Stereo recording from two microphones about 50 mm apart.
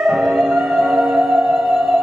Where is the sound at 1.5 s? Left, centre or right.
Centre.